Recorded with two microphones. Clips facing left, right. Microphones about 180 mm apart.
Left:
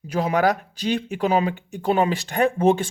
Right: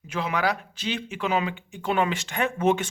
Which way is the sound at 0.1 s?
40° left (ahead or behind).